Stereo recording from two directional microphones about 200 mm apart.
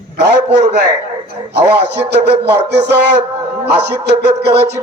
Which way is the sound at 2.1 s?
55° right (ahead or behind).